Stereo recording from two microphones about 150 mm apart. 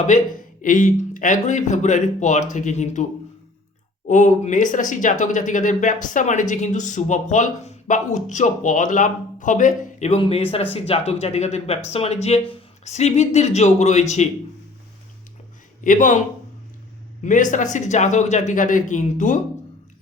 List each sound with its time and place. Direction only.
0.1 s speech: 55° left (ahead or behind)
10.2 s speech: 40° left (ahead or behind)
15.8 s speech: 60° left (ahead or behind)
17.2 s speech: 60° left (ahead or behind)